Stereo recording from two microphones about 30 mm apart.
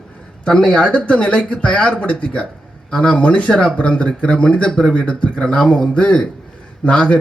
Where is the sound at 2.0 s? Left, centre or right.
Left.